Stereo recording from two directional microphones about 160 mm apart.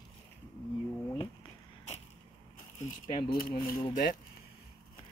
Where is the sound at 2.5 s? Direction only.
55° left (ahead or behind).